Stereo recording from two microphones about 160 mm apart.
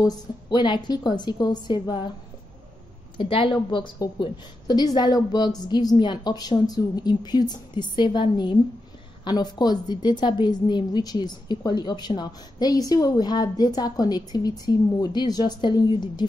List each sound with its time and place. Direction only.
0.0 s a woman's voice: 25° left (ahead or behind)
3.2 s a woman's voice: 30° left (ahead or behind)